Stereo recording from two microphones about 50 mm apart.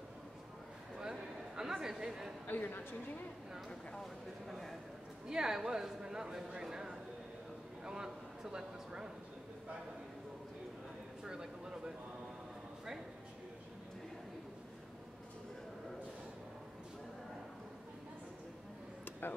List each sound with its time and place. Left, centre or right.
0.9 s a sound: centre
2.4 s a man's voice: left
3.6 s speech: centre
5.3 s speech: centre
11.2 s speech: centre